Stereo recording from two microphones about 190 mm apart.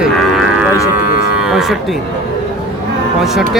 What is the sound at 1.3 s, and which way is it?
Speech, 5° right (ahead or behind).